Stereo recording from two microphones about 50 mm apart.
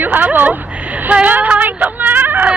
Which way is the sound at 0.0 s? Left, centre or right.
Right.